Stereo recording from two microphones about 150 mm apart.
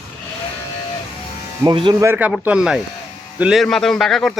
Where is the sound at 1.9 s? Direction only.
15° right (ahead or behind).